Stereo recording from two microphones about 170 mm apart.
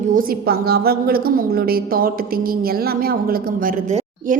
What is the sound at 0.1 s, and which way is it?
A woman's voice, 55° right (ahead or behind).